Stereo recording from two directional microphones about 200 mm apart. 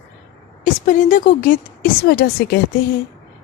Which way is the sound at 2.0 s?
55° left (ahead or behind).